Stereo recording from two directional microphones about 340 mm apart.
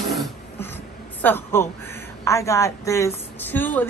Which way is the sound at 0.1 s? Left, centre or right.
Centre.